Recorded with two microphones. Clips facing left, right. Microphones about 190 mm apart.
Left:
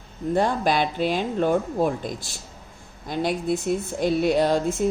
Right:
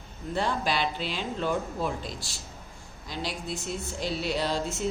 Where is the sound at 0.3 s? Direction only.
50° left (ahead or behind).